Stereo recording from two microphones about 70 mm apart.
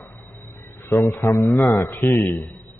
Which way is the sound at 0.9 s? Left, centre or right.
Left.